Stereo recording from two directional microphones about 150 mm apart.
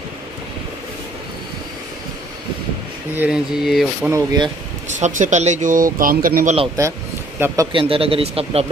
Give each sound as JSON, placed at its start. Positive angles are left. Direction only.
{"t": 3.2, "sound": "speech", "side_deg": -5}
{"t": 4.1, "sound": "speech", "side_deg": -25}
{"t": 4.9, "sound": "speech", "side_deg": -55}
{"t": 7.3, "sound": "speech", "side_deg": -15}
{"t": 7.7, "sound": "speech", "side_deg": -40}